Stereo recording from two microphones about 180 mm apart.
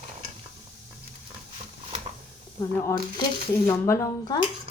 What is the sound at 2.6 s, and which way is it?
A woman's voice, 15° left (ahead or behind).